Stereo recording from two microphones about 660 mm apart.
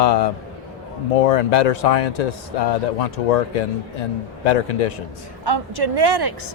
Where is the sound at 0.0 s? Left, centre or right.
Left.